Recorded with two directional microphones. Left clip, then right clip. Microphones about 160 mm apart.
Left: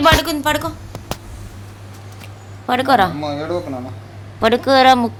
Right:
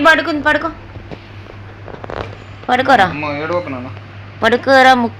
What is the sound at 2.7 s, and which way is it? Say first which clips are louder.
Speech: right 3 dB; 15° left (ahead or behind).